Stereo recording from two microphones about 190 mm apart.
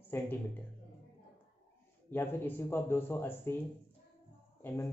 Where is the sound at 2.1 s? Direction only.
10° left (ahead or behind).